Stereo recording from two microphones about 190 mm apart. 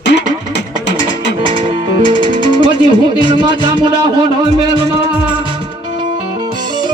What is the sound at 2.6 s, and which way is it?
Speech, 25° right (ahead or behind).